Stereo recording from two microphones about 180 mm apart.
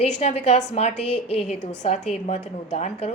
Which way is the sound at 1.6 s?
75° left (ahead or behind).